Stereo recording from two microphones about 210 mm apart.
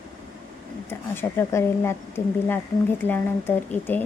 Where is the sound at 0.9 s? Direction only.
10° left (ahead or behind).